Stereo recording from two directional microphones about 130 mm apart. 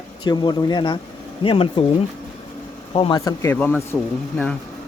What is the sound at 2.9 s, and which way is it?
Speech, 40° left (ahead or behind).